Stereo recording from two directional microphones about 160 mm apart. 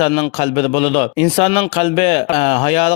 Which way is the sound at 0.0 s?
40° left (ahead or behind).